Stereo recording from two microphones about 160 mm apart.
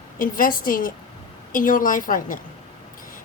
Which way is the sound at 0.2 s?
60° left (ahead or behind).